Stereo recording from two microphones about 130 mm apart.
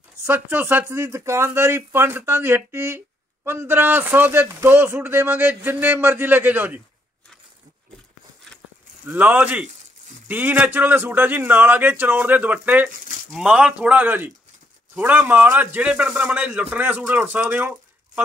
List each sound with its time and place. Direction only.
0.2 s a man's voice: 15° right (ahead or behind)
9.0 s a man's voice: 10° right (ahead or behind)